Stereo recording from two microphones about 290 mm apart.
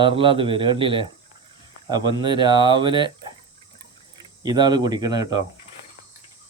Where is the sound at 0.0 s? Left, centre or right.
Centre.